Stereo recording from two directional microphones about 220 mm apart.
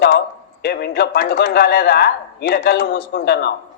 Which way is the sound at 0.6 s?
45° left (ahead or behind).